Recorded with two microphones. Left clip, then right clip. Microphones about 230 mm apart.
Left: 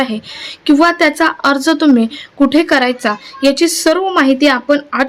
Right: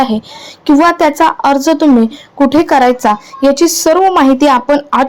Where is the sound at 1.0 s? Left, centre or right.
Centre.